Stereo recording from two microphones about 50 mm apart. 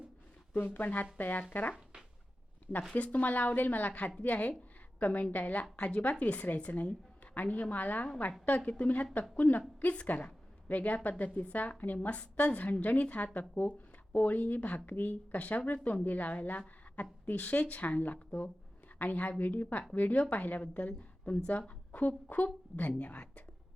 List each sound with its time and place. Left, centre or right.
0.5 s a woman's voice: left
2.9 s a woman's voice: left